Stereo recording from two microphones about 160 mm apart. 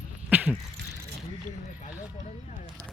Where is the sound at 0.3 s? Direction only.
10° right (ahead or behind).